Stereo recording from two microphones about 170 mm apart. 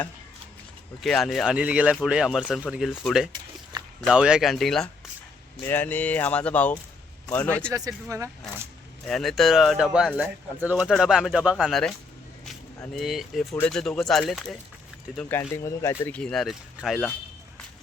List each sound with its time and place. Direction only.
1.0 s speech: centre (ahead or behind)
5.6 s speech: 10° left (ahead or behind)
8.1 s speech: 20° right (ahead or behind)
9.0 s speech: centre (ahead or behind)
12.9 s speech: centre (ahead or behind); by 16.1 s 20° left (ahead or behind)
16.1 s speech: 5° left (ahead or behind)